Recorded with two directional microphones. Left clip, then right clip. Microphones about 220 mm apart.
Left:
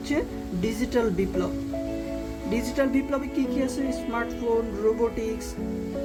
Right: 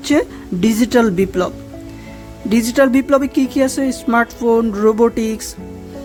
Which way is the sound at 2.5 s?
40° right (ahead or behind).